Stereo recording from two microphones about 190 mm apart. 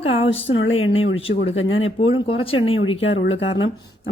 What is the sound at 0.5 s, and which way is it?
A woman's voice, 90° left.